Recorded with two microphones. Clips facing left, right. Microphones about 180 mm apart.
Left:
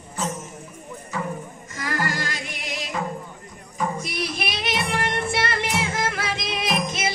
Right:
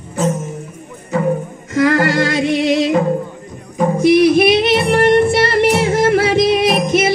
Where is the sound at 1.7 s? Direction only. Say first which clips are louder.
Right 15 dB; 75° right (ahead or behind).